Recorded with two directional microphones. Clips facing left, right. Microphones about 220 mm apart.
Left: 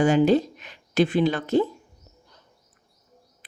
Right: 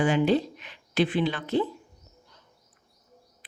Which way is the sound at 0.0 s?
45° left (ahead or behind).